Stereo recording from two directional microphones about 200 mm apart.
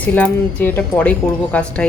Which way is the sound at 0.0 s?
5° left (ahead or behind).